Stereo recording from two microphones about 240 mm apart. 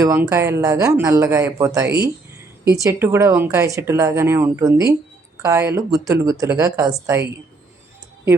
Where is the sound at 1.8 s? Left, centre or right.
Right.